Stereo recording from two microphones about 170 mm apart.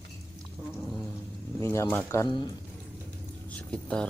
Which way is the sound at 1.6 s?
15° left (ahead or behind).